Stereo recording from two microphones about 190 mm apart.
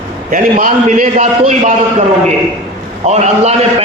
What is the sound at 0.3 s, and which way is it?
A man's voice, 45° right (ahead or behind).